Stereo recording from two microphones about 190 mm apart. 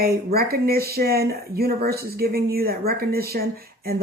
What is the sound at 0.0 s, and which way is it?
A woman's voice, 55° right (ahead or behind).